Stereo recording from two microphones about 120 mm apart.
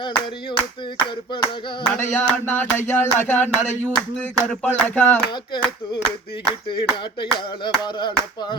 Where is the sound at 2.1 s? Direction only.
15° left (ahead or behind).